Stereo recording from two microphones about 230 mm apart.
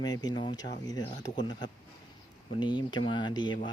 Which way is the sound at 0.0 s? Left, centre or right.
Centre.